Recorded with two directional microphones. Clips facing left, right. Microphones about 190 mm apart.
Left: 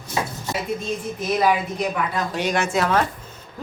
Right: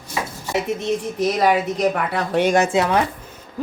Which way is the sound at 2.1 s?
55° right (ahead or behind).